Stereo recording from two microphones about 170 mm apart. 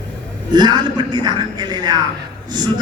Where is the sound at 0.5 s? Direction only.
25° right (ahead or behind).